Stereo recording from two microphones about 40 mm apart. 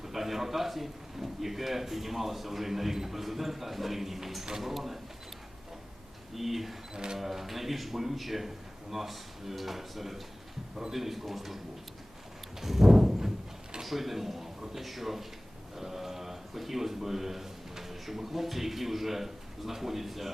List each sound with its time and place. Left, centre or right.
0.0 s a man's voice: centre
6.3 s a man's voice: centre
6.9 s speech: centre
7.2 s a man's voice: centre
12.6 s a sound: centre
13.8 s a man's voice: centre